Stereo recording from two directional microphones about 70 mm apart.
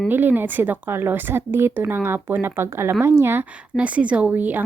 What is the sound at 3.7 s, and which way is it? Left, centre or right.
Speech, centre.